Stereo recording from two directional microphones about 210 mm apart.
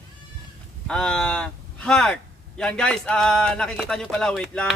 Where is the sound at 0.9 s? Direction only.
5° left (ahead or behind).